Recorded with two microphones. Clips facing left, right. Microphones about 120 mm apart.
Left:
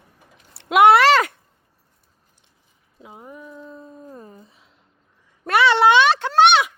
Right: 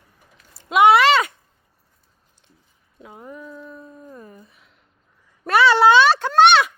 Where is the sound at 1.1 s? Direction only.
55° left (ahead or behind).